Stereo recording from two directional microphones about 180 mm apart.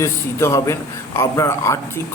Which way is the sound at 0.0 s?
15° left (ahead or behind).